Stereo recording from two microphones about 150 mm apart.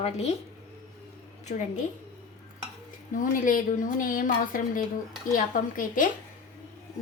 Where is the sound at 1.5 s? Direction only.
55° left (ahead or behind).